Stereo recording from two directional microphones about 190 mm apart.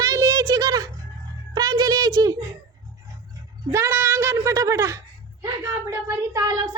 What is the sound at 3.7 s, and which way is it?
A woman's voice, 15° right (ahead or behind).